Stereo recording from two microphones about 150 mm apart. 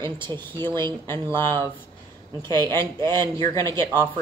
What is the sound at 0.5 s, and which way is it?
A woman's voice, 15° left (ahead or behind).